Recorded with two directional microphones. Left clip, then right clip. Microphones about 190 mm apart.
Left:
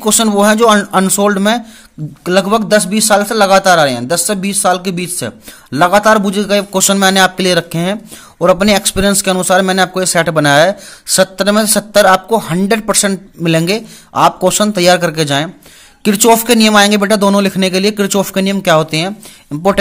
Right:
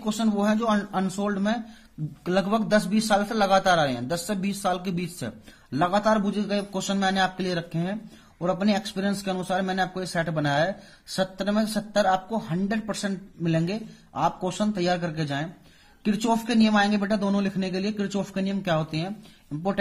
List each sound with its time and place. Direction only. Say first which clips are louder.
0.0 s speech: left 16 dB; 45° left (ahead or behind)
2.2 s a man's voice: left 13 dB; 30° left (ahead or behind)